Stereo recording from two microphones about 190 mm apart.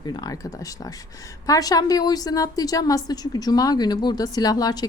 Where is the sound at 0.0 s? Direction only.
20° left (ahead or behind).